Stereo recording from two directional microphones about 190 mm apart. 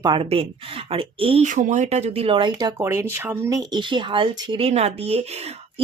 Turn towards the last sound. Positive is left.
turn(degrees=-35)  # may be behind; listen again after turning